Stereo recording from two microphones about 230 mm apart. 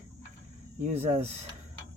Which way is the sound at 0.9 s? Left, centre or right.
Right.